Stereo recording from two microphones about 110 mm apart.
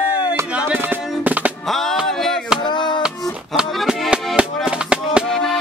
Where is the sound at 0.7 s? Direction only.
15° right (ahead or behind).